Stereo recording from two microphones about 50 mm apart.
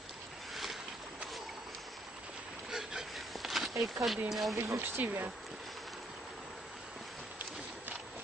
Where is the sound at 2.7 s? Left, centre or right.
Centre.